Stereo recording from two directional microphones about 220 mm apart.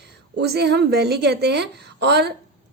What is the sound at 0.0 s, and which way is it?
A woman's voice, 50° right (ahead or behind).